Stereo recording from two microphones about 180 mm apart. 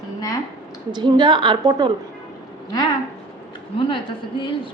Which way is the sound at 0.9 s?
25° right (ahead or behind).